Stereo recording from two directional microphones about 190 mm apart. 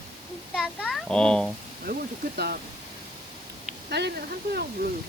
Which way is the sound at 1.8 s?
55° right (ahead or behind).